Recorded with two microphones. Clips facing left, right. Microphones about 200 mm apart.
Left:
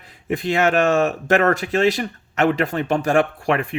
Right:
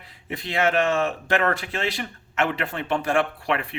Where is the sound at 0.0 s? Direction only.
45° left (ahead or behind).